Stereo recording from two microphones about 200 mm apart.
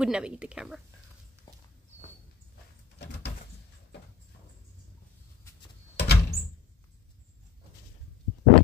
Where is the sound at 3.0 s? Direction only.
55° left (ahead or behind).